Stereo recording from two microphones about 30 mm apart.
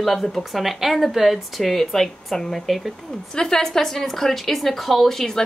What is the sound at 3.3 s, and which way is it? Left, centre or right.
Speech, left.